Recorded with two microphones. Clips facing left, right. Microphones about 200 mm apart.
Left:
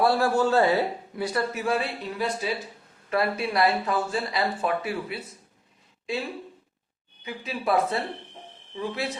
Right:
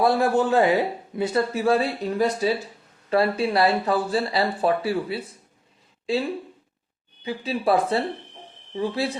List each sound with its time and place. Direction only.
0.0 s speech: 20° right (ahead or behind)
7.3 s speech: 30° right (ahead or behind)